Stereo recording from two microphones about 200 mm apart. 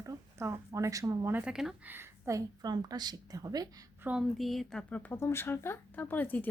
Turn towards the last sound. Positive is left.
turn(degrees=10)  # may be behind; listen again after turning